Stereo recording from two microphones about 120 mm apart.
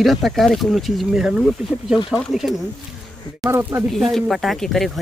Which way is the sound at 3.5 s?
20° right (ahead or behind).